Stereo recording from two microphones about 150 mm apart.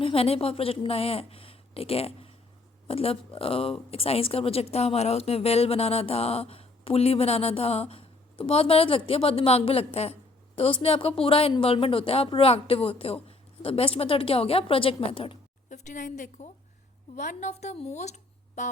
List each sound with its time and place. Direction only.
0.0 s speech: 40° left (ahead or behind)
15.7 s a woman's voice: 55° left (ahead or behind)